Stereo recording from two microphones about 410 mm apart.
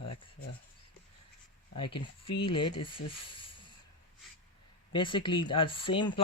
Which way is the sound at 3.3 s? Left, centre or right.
Centre.